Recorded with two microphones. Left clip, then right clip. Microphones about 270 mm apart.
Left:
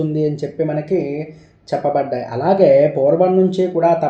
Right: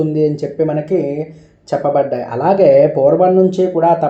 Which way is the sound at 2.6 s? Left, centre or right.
Centre.